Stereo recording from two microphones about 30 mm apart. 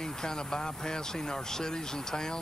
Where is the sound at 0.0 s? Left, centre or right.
Centre.